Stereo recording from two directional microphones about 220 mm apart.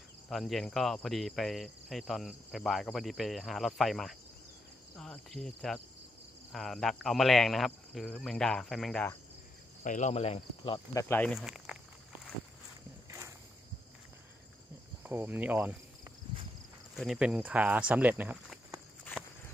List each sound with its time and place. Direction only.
0.3 s insect: centre (ahead or behind)
9.8 s speech: 35° left (ahead or behind)
10.9 s speech: 10° left (ahead or behind)
15.0 s speech: 10° right (ahead or behind)